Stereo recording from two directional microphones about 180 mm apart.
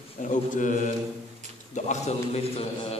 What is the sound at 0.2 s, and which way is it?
Mantra, 45° left (ahead or behind).